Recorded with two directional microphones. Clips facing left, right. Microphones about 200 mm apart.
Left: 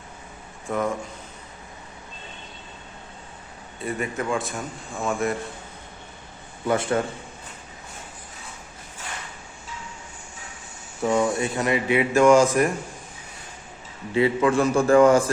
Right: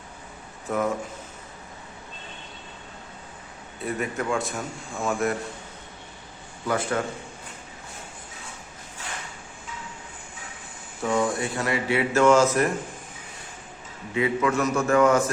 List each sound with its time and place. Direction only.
0.7 s speech: 5° right (ahead or behind)
3.8 s speech: centre (ahead or behind)
6.7 s a man's voice: 25° left (ahead or behind)
11.0 s speech: 20° left (ahead or behind)
14.1 s a man's voice: 30° left (ahead or behind)